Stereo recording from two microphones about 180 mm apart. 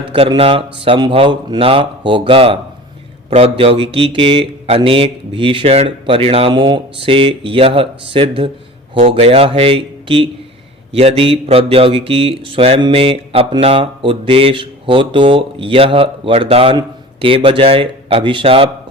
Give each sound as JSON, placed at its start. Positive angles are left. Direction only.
{"t": 0.1, "sound": "speech", "side_deg": -30}